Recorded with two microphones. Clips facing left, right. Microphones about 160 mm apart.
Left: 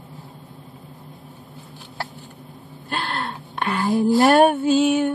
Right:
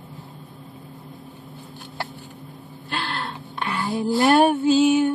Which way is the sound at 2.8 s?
50° left (ahead or behind).